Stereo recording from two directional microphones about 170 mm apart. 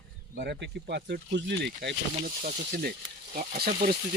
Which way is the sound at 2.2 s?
55° right (ahead or behind).